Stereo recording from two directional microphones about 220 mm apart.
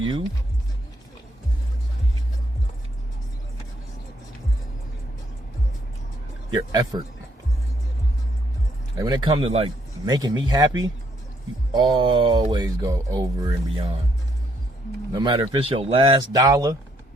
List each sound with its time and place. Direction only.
6.5 s speech: 20° right (ahead or behind)
9.0 s speech: 20° right (ahead or behind)
11.7 s speech: 20° right (ahead or behind)
15.1 s speech: 20° right (ahead or behind)